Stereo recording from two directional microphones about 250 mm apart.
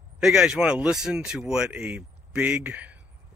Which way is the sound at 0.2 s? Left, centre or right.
Centre.